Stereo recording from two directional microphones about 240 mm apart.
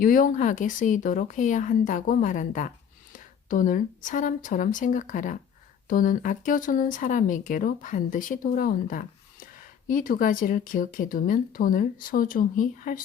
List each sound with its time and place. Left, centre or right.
0.0 s speech: left